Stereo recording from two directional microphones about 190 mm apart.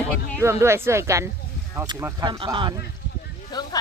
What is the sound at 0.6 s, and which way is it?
Speech, 15° right (ahead or behind).